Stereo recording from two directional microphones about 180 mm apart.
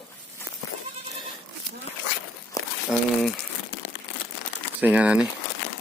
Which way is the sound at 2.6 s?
20° left (ahead or behind).